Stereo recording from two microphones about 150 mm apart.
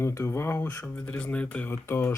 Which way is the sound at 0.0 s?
20° left (ahead or behind).